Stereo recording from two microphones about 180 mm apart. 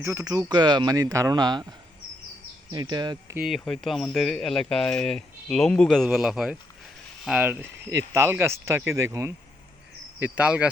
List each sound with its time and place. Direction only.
0.0 s speech: 15° right (ahead or behind)
2.7 s speech: 25° right (ahead or behind)
3.3 s speech: 5° right (ahead or behind)
10.3 s speech: 5° right (ahead or behind)